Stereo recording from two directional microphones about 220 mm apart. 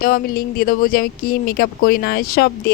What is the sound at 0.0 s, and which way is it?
Speech, 40° left (ahead or behind).